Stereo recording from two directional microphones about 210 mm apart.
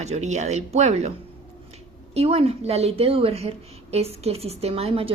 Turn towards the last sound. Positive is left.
turn(degrees=-25)  # may be behind; listen again after turning